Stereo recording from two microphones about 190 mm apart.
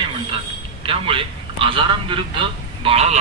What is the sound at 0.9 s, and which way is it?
A man's voice, 30° right (ahead or behind).